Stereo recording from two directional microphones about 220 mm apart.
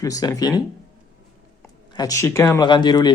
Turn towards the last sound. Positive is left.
turn(degrees=20)  # may be behind; listen again after turning